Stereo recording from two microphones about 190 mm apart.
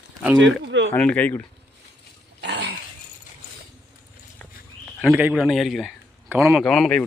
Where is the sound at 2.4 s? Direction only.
60° right (ahead or behind).